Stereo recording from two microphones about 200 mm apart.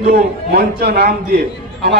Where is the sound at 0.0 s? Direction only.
50° right (ahead or behind).